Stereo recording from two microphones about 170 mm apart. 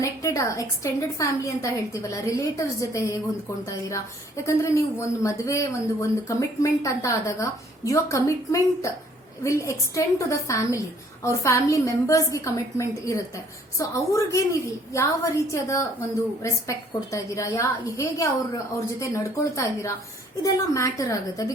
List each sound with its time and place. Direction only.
0.0 s a woman's voice: 20° left (ahead or behind)